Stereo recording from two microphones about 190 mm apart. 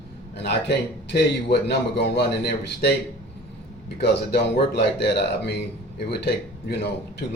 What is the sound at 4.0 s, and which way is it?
A man's voice, 60° left (ahead or behind).